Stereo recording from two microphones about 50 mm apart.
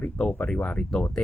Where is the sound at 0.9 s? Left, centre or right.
Centre.